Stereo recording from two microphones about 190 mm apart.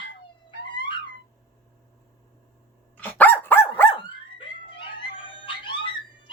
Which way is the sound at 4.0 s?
25° left (ahead or behind).